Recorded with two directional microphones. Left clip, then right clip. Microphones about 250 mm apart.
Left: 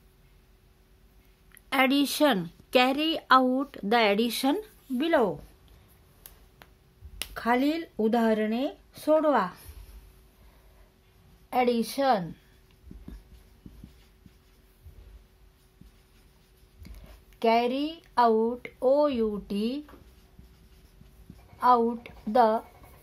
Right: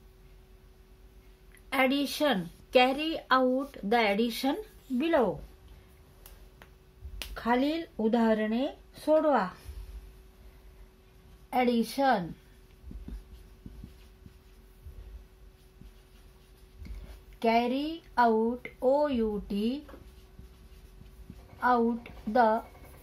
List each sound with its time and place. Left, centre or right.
1.7 s a woman's voice: left
7.2 s speech: left
11.5 s speech: left
17.4 s speech: left
21.5 s speech: left